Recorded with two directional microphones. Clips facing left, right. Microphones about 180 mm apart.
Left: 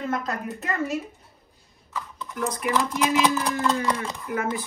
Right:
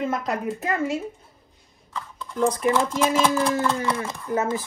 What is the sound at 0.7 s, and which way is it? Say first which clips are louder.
Speech: right 2 dB; 15° right (ahead or behind).